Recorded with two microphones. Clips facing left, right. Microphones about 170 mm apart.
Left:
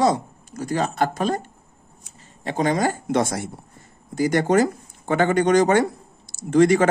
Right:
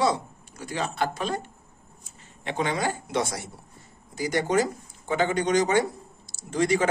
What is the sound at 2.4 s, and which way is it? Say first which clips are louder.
Speech: left 6 dB; 40° left (ahead or behind).